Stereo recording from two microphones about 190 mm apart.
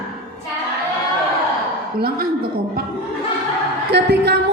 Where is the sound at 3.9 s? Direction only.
60° right (ahead or behind).